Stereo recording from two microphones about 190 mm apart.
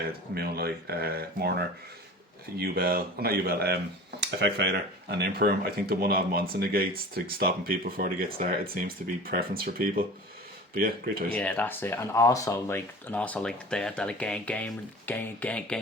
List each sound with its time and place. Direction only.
0.3 s speech: 55° right (ahead or behind)
11.3 s speech: 10° left (ahead or behind)